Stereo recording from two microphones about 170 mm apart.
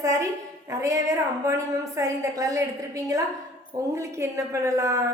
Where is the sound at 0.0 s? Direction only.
20° right (ahead or behind).